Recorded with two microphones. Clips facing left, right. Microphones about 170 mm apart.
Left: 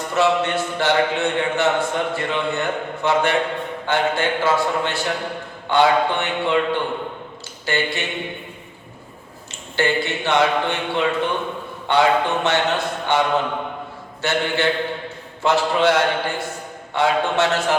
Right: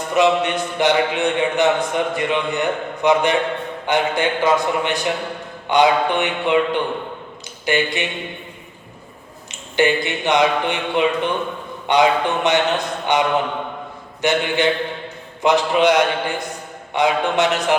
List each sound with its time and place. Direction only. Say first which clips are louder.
0.1 s a man's voice: right 2 dB; 15° right (ahead or behind)
9.5 s a man's voice: right 4 dB; 15° right (ahead or behind)